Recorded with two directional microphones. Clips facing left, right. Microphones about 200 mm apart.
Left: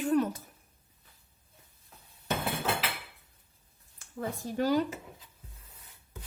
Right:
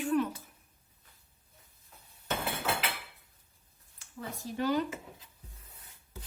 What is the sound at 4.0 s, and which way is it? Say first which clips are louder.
Speech: left 6 dB; 45° left (ahead or behind).